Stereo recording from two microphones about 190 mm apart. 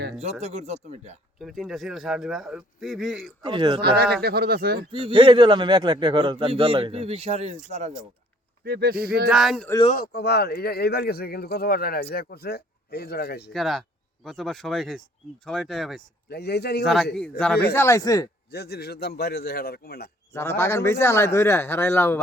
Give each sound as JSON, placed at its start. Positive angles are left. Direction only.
{"t": 0.2, "sound": "speech", "side_deg": -35}
{"t": 1.4, "sound": "a man's voice", "side_deg": 0}
{"t": 3.4, "sound": "a man's voice", "side_deg": -25}
{"t": 3.8, "sound": "speech", "side_deg": -55}
{"t": 4.9, "sound": "a man's voice", "side_deg": -25}
{"t": 8.6, "sound": "speech", "side_deg": -55}
{"t": 9.3, "sound": "a man's voice", "side_deg": 0}
{"t": 9.9, "sound": "speech", "side_deg": 55}
{"t": 13.5, "sound": "a man's voice", "side_deg": 0}
{"t": 16.3, "sound": "speech", "side_deg": 60}
{"t": 16.8, "sound": "a man's voice", "side_deg": 0}
{"t": 18.5, "sound": "speech", "side_deg": 60}
{"t": 20.3, "sound": "speech", "side_deg": 15}